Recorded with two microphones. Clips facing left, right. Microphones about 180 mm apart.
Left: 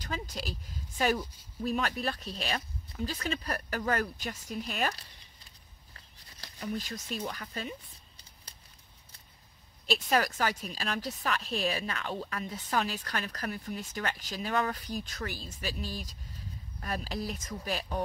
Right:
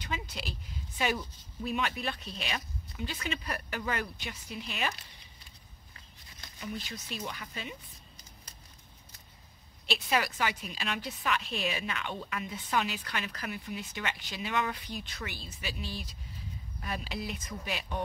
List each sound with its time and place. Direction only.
0.0 s speech: 40° left (ahead or behind)
6.4 s speech: 40° left (ahead or behind)
9.8 s speech: 40° left (ahead or behind)